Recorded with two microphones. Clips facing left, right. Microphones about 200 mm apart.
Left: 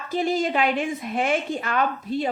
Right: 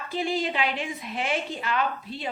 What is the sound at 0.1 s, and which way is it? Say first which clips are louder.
Speech: left 5 dB; 45° left (ahead or behind).